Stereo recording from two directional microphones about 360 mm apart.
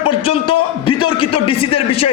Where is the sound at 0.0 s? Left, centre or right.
Centre.